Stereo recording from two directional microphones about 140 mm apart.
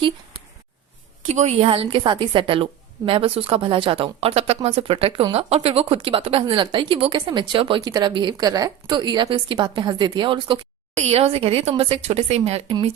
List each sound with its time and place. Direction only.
1.3 s speech: 50° right (ahead or behind); by 10.6 s 35° right (ahead or behind)
11.0 s a woman's voice: 45° right (ahead or behind)